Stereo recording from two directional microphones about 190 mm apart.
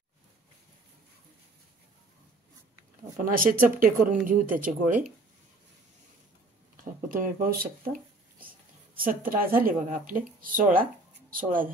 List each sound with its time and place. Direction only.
3.2 s speech: 45° right (ahead or behind)
6.8 s a sound: 45° right (ahead or behind)
8.9 s speech: 50° right (ahead or behind)